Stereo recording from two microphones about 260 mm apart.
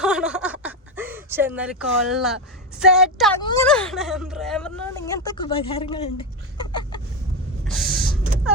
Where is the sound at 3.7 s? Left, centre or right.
Centre.